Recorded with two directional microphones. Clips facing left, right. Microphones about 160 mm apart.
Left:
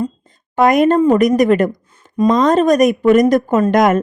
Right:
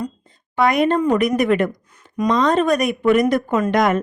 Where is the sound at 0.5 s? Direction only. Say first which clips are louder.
Left 5 dB; 45° left (ahead or behind).